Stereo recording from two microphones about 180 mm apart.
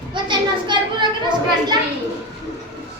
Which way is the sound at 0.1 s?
25° right (ahead or behind).